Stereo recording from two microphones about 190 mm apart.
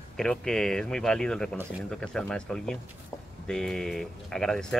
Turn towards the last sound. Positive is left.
turn(degrees=0)  # may be behind; listen again after turning